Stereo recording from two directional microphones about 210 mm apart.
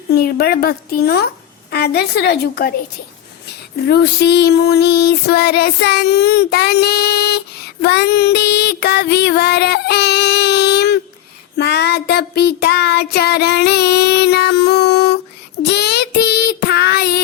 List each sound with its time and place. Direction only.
0.1 s a woman's voice: 50° left (ahead or behind)
3.4 s a sound: 50° left (ahead or behind)
15.6 s child singing: 50° left (ahead or behind)